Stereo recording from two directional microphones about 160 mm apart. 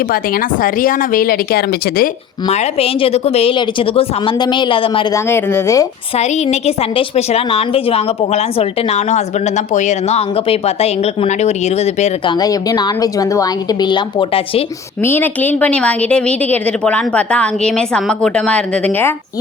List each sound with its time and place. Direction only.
0.1 s speech: 65° left (ahead or behind)
2.5 s a woman's voice: 40° left (ahead or behind)
5.1 s a woman's voice: 15° left (ahead or behind)
6.1 s a woman's voice: 45° left (ahead or behind)
12.2 s a woman's voice: 25° left (ahead or behind)
15.0 s a woman's voice: 10° left (ahead or behind)